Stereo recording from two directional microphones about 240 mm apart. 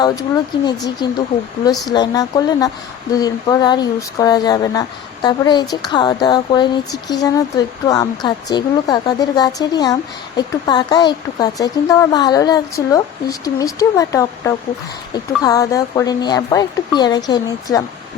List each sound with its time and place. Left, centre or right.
0.0 s speech: centre